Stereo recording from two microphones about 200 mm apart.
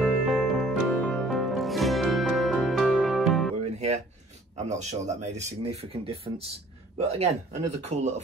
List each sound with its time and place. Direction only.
0.0 s music: centre (ahead or behind)
4.6 s speech: 35° right (ahead or behind)